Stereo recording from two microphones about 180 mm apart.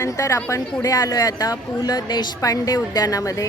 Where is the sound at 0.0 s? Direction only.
15° left (ahead or behind).